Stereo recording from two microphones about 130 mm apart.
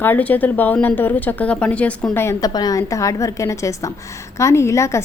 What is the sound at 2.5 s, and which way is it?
A woman's voice, 30° left (ahead or behind).